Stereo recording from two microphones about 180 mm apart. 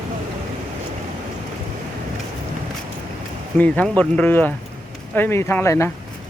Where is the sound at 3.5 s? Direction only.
10° left (ahead or behind).